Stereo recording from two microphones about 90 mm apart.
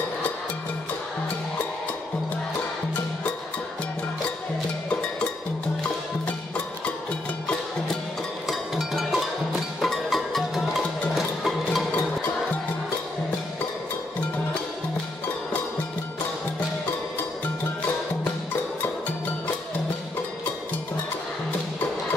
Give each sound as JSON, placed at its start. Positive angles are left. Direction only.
{"t": 8.5, "sound": "music", "side_deg": 0}